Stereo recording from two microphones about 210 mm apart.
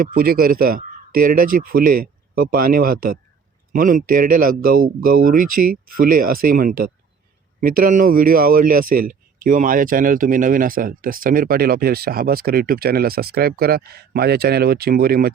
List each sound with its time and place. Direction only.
0.0 s speech: 45° right (ahead or behind)